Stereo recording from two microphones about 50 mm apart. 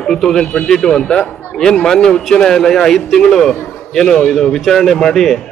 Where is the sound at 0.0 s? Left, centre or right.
Centre.